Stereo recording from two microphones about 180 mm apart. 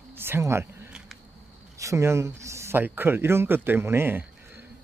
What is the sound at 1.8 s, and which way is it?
Speech, 15° right (ahead or behind).